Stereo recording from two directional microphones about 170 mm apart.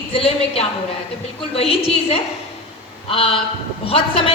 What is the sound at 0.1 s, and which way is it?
A woman's voice, 35° left (ahead or behind).